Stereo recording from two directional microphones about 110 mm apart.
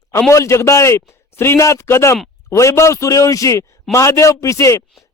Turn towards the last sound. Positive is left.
turn(degrees=25)  # may be behind; listen again after turning